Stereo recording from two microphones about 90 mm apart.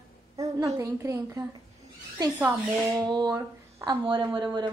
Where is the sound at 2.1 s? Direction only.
45° right (ahead or behind).